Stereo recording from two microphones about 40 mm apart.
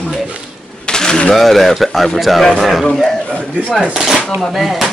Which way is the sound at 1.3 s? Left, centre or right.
Centre.